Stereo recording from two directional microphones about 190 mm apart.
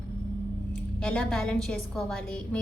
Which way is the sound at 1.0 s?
5° left (ahead or behind).